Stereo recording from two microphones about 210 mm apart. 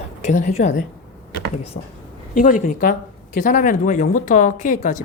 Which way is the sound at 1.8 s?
40° left (ahead or behind).